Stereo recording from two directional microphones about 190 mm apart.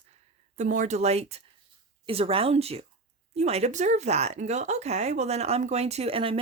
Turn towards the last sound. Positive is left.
turn(degrees=-30)  # may be behind; listen again after turning